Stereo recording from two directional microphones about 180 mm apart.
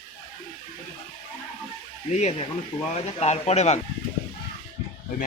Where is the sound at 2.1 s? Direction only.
35° left (ahead or behind).